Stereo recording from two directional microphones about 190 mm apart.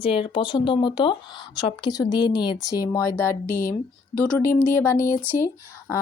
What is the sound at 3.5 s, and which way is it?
Speech, 45° left (ahead or behind).